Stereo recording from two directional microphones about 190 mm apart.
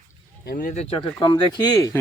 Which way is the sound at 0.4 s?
45° left (ahead or behind).